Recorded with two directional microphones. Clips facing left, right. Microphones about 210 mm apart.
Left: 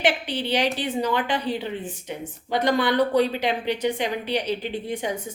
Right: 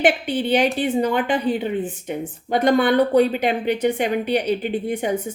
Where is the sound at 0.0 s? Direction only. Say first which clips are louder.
Right 5 dB; 55° right (ahead or behind).